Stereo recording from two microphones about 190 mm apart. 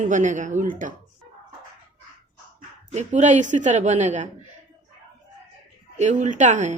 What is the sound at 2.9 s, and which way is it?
A woman's voice, 40° right (ahead or behind).